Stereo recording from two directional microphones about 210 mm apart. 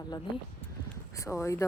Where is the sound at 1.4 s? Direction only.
15° left (ahead or behind).